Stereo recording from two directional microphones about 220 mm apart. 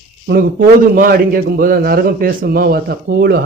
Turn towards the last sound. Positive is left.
turn(degrees=-45)  # may be behind; listen again after turning